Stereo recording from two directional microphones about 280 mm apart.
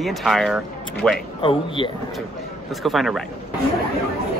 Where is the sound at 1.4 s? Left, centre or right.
Centre.